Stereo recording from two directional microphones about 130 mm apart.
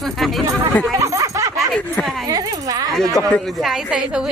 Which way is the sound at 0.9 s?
25° right (ahead or behind).